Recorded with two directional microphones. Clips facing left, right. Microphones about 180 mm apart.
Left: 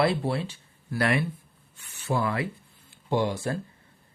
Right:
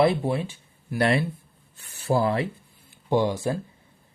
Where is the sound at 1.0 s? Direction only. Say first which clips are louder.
Right 3 dB; 30° right (ahead or behind).